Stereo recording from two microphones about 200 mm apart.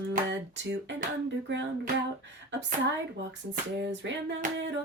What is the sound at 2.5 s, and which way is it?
Female singing, 60° right (ahead or behind).